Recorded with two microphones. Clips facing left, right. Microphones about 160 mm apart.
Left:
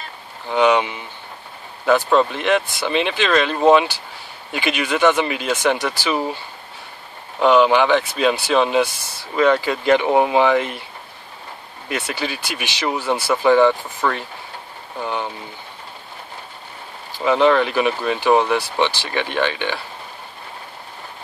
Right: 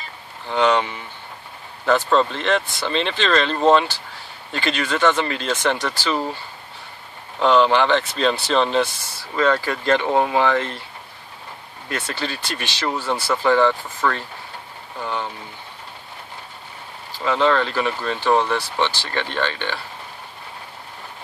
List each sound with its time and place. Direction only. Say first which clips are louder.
0.5 s speech: left 2 dB; 15° left (ahead or behind)
7.3 s speech: left 2 dB; 10° left (ahead or behind)
11.9 s speech: left 2 dB; 10° left (ahead or behind)
17.1 s speech: left 4 dB; 15° left (ahead or behind)